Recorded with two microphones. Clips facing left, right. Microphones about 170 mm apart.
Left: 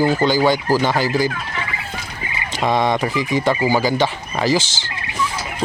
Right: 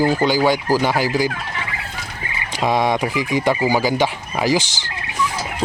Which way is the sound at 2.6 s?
10° right (ahead or behind).